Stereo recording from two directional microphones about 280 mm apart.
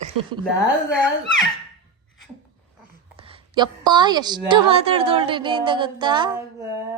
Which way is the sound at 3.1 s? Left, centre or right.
Centre.